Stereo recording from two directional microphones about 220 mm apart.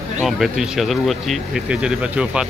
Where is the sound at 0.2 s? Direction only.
Centre (ahead or behind).